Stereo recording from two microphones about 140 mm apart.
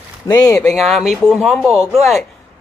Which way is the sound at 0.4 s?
20° left (ahead or behind).